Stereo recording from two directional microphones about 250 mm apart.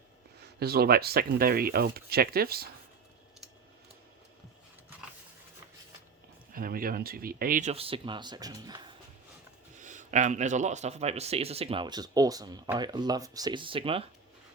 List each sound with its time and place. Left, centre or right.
0.3 s speech: right
6.5 s speech: right; by 9.0 s centre
9.8 s speech: right